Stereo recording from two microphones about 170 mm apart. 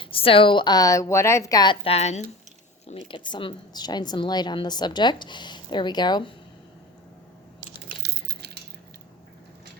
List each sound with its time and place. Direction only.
0.0 s a woman's voice: 30° left (ahead or behind)
3.1 s a woman's voice: 30° left (ahead or behind)
7.9 s a sound: 70° right (ahead or behind)